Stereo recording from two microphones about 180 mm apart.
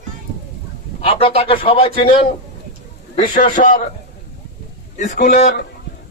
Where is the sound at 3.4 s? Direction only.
50° left (ahead or behind).